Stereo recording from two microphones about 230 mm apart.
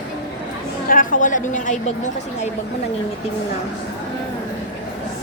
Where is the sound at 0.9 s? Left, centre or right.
Left.